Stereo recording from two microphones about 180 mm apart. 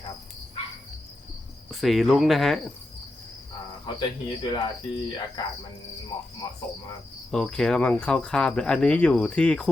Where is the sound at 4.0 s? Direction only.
20° left (ahead or behind).